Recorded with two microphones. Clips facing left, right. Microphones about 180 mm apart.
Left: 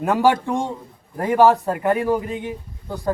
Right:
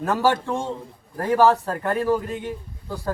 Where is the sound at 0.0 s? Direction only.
15° left (ahead or behind).